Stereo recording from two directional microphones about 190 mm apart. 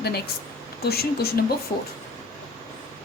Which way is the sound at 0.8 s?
55° left (ahead or behind).